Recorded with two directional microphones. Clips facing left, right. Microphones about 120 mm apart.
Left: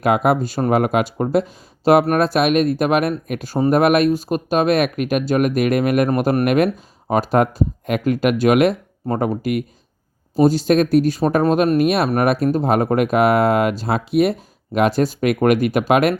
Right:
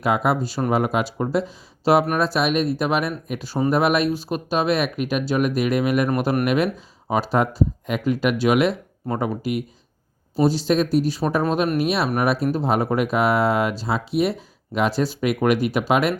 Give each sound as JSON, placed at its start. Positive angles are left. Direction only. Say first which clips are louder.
{"t": 0.0, "sound": "speech", "louder": "left 4 dB", "side_deg": 55}